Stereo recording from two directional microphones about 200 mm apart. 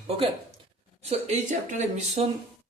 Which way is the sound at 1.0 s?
35° right (ahead or behind).